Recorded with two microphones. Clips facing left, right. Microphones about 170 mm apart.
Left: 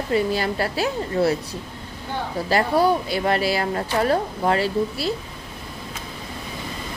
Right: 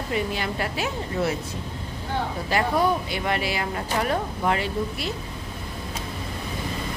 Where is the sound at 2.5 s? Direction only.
35° left (ahead or behind).